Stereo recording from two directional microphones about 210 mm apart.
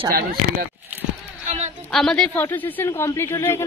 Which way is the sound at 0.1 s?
45° right (ahead or behind).